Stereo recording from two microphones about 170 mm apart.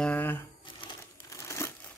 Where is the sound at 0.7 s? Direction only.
30° left (ahead or behind).